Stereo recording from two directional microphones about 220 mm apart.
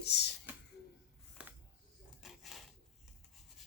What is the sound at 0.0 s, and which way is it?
Speech, 50° left (ahead or behind).